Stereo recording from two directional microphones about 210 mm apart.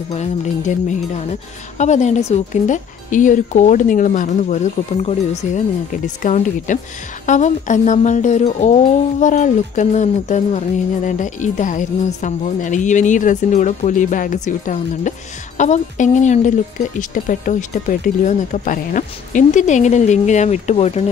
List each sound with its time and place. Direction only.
0.1 s a woman's voice: 35° left (ahead or behind)